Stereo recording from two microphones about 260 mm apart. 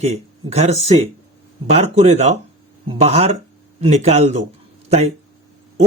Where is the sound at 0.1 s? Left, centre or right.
Right.